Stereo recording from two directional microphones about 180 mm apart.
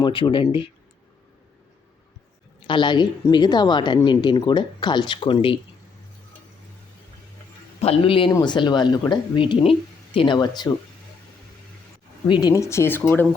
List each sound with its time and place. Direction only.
0.0 s a woman's voice: 25° left (ahead or behind)
2.6 s a woman's voice: 25° left (ahead or behind)
7.8 s a man's voice: 30° left (ahead or behind)
12.2 s speech: 20° left (ahead or behind)